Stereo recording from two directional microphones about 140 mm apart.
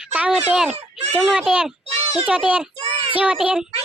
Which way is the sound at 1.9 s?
50° right (ahead or behind).